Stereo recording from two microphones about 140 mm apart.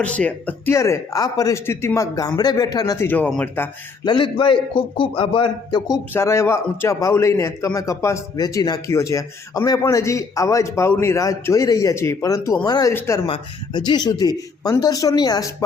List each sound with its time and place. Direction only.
0.0 s a man's voice: 10° left (ahead or behind); by 3.1 s 25° left (ahead or behind)
3.1 s speech: 10° left (ahead or behind)
4.0 s a man's voice: 35° left (ahead or behind)
6.1 s a man's voice: 20° left (ahead or behind)
12.9 s a man's voice: 20° left (ahead or behind)
13.2 s a man's voice: 35° left (ahead or behind)